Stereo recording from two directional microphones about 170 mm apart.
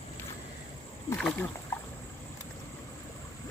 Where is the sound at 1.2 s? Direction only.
5° left (ahead or behind).